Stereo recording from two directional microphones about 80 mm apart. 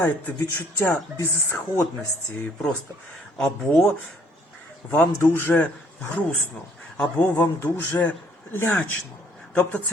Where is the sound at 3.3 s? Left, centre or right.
Centre.